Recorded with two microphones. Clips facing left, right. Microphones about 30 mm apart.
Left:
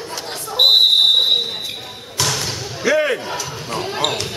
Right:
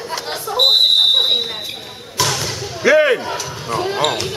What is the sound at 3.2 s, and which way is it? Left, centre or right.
Basketball bounce, centre.